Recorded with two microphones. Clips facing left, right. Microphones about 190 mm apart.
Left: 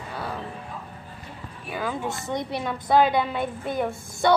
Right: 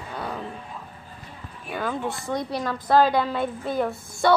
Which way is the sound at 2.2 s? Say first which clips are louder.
Right 1 dB; 20° left (ahead or behind).